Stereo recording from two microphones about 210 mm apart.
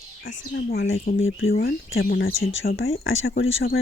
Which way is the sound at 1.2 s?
70° left (ahead or behind).